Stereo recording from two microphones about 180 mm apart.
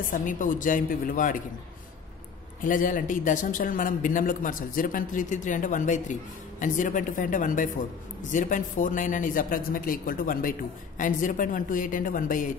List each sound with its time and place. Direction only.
0.0 s speech: 45° left (ahead or behind)
2.6 s speech: 50° left (ahead or behind)